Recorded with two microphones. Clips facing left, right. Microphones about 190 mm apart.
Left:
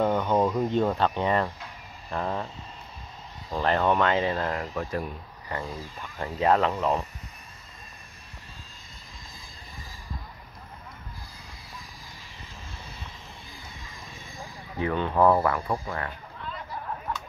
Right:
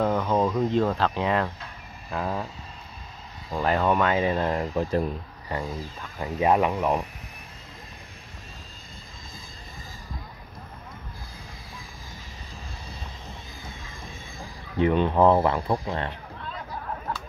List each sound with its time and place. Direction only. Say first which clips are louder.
0.1 s a sound: even; 5° right (ahead or behind)
0.4 s speech: right 1 dB; 10° left (ahead or behind); by 5.6 s 30° right (ahead or behind)
6.1 s speech: right 1 dB; 15° right (ahead or behind)
14.8 s speech: right 3 dB; 20° right (ahead or behind)